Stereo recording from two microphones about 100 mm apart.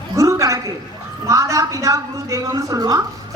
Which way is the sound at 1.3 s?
30° right (ahead or behind).